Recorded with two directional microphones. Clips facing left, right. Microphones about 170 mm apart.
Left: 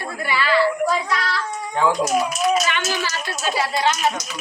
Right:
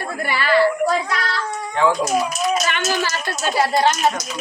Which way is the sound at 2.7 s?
50° right (ahead or behind).